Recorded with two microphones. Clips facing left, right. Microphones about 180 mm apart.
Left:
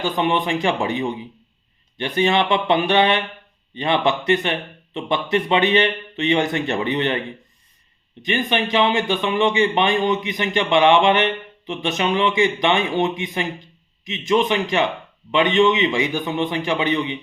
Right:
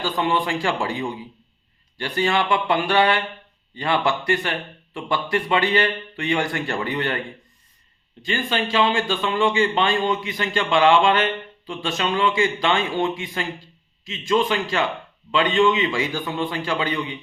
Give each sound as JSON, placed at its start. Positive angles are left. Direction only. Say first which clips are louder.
{"t": 0.0, "sound": "speech", "louder": "left 2 dB", "side_deg": 20}